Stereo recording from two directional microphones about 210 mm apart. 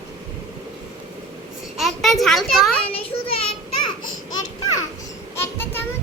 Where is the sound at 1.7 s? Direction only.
Centre (ahead or behind).